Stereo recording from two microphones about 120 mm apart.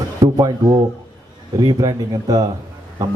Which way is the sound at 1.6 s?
35° right (ahead or behind).